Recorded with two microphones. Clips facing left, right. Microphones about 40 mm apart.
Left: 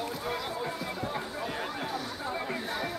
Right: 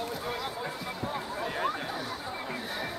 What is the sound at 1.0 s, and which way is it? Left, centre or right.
Music, centre.